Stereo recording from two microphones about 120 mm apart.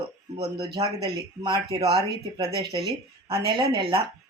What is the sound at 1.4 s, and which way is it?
Speech, 40° right (ahead or behind).